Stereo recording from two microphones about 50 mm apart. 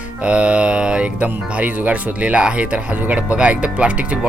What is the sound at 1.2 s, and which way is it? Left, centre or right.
Speech, right.